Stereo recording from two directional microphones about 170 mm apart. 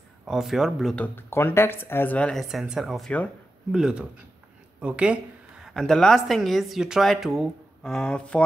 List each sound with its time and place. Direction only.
0.2 s speech: centre (ahead or behind)